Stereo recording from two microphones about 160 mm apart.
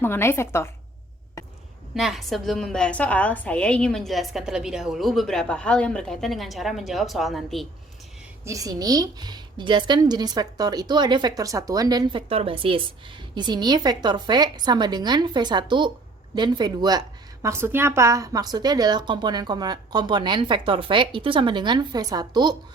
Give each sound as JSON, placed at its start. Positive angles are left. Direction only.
{"t": 0.0, "sound": "a woman's voice", "side_deg": 15}
{"t": 2.0, "sound": "a woman's voice", "side_deg": 0}
{"t": 8.4, "sound": "a woman's voice", "side_deg": -20}